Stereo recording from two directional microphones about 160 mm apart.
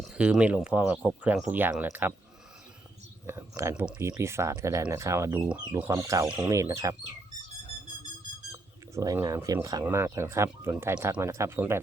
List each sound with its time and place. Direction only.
0.1 s speech: 5° right (ahead or behind)
3.2 s speech: 15° right (ahead or behind)
6.2 s speech: 5° right (ahead or behind)
6.5 s speech: 20° right (ahead or behind)
9.0 s speech: 20° right (ahead or behind)